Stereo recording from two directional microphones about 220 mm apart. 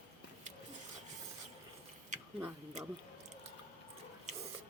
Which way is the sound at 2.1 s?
35° right (ahead or behind).